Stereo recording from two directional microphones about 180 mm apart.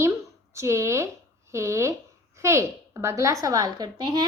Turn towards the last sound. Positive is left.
turn(degrees=-25)  # may be behind; listen again after turning